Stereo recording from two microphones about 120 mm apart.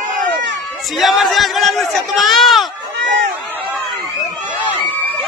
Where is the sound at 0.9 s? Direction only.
Centre (ahead or behind).